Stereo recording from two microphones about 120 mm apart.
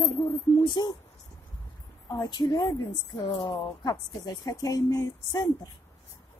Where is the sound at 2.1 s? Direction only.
40° left (ahead or behind).